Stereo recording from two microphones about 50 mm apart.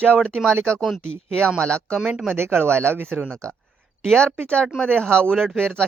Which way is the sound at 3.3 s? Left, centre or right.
Centre.